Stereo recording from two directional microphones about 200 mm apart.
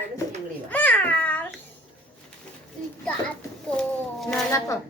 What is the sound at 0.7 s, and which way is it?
Babbling, 10° left (ahead or behind).